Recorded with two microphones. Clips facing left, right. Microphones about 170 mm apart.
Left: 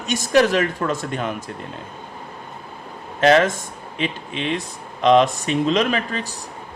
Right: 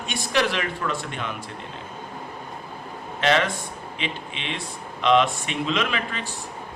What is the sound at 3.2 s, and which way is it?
Speech, 40° left (ahead or behind).